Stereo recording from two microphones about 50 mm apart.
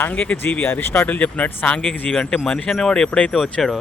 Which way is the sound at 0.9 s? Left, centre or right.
Left.